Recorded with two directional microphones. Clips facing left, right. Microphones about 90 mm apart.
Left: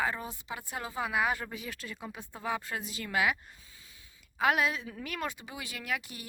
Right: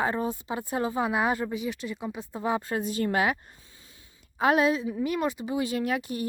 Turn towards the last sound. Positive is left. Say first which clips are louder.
# right 9 dB
turn(degrees=-35)  # may be behind; listen again after turning